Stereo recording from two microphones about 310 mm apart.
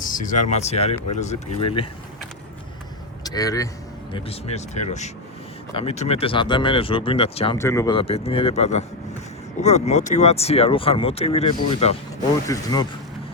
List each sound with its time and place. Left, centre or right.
0.0 s speech: left
3.2 s speech: centre